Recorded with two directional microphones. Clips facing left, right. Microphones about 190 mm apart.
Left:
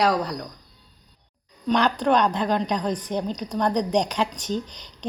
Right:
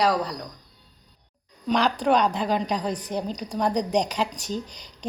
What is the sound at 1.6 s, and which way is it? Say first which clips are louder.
A woman's voice: left 1 dB; 5° right (ahead or behind).